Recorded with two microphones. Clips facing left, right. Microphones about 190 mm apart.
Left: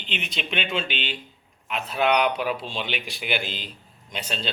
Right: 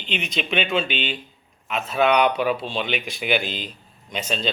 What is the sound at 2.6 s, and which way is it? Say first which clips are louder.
A man's voice: right 5 dB; 55° right (ahead or behind).